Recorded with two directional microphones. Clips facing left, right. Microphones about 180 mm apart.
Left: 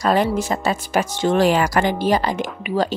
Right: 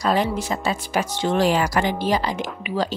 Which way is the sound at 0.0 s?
50° left (ahead or behind).